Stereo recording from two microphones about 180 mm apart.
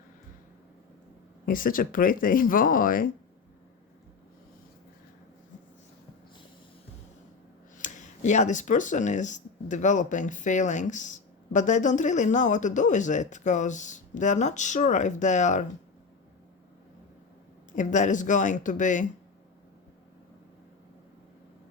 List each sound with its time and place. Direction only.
1.5 s speech: 50° left (ahead or behind)
7.8 s speech: 40° left (ahead or behind)
17.7 s speech: 45° left (ahead or behind)